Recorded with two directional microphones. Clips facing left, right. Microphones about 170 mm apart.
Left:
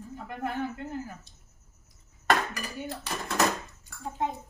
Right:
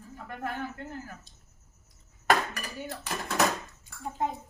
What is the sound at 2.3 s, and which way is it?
Dishes, centre (ahead or behind).